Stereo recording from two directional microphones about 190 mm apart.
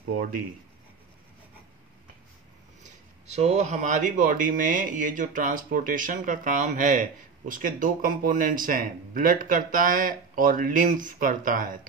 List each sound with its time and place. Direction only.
3.3 s speech: 35° right (ahead or behind)